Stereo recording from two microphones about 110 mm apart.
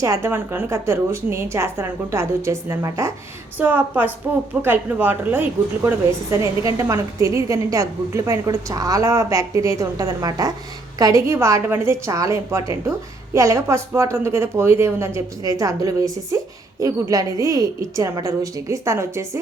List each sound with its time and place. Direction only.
0.0 s a woman's voice: 25° right (ahead or behind)
3.6 s a woman's voice: 15° right (ahead or behind)